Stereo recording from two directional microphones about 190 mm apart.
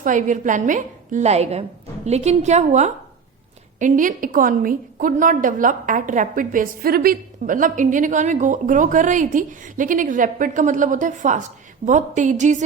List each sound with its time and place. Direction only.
0.0 s a woman's voice: 40° right (ahead or behind)